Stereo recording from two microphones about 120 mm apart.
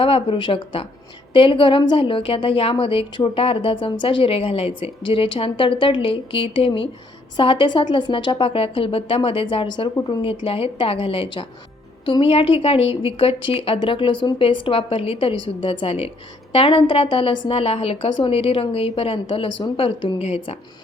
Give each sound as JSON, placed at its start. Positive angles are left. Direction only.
{"t": 0.0, "sound": "a woman's voice", "side_deg": 50}